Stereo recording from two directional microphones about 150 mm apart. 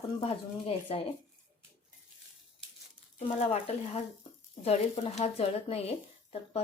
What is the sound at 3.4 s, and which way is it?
Speech, 45° left (ahead or behind).